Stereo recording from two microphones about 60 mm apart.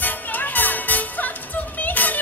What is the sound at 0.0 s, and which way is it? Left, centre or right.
Music, left.